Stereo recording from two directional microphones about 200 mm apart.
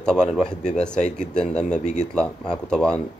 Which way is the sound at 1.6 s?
35° left (ahead or behind).